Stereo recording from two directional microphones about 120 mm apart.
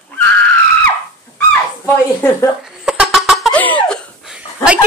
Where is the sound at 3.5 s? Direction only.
10° left (ahead or behind).